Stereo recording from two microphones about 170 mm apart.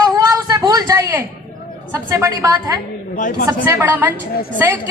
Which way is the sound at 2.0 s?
20° right (ahead or behind).